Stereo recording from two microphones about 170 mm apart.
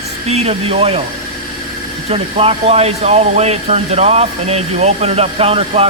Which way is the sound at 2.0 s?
35° right (ahead or behind).